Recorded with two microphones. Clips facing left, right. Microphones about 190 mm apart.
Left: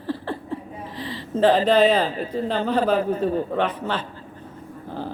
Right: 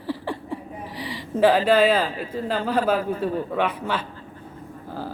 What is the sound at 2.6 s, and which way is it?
A woman's voice, 10° right (ahead or behind).